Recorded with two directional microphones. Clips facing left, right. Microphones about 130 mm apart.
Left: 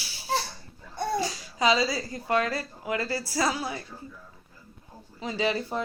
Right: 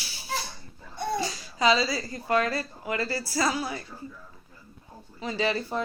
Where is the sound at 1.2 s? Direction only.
10° left (ahead or behind).